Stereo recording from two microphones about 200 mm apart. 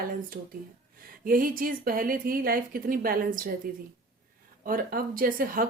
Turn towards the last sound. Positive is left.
turn(degrees=-45)  # may be behind; listen again after turning